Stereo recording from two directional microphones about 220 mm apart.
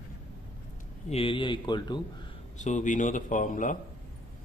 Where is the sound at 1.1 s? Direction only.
25° left (ahead or behind).